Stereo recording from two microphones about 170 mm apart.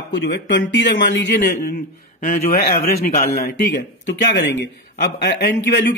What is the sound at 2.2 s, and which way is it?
Speech, 55° left (ahead or behind).